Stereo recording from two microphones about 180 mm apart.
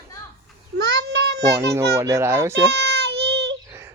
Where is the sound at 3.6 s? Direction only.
15° right (ahead or behind).